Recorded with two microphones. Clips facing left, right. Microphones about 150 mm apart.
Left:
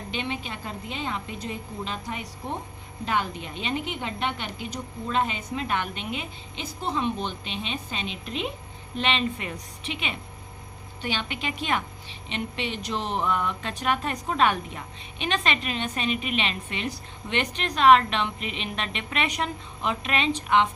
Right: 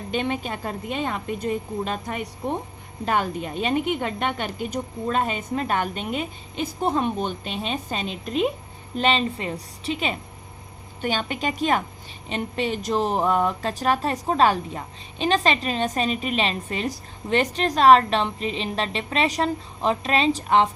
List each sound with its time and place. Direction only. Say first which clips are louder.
0.1 s a woman's voice: right 7 dB; 45° right (ahead or behind)